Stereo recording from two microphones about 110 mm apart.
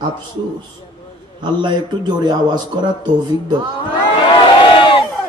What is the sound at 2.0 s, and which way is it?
Speech, 40° right (ahead or behind).